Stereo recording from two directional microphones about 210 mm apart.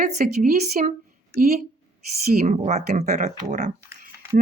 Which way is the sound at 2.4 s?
30° right (ahead or behind).